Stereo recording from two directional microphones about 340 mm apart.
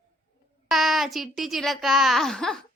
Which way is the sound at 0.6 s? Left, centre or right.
Centre.